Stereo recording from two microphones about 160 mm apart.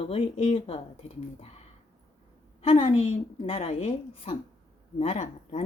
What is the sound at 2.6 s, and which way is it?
A woman's voice, 40° left (ahead or behind).